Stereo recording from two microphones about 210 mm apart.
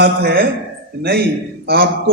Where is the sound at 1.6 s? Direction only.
45° right (ahead or behind).